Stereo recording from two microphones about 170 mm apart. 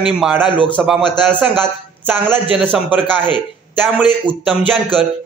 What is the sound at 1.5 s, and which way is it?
A man's voice, 10° right (ahead or behind).